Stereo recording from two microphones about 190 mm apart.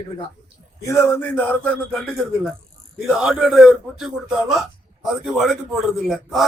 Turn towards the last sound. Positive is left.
turn(degrees=0)  # may be behind; listen again after turning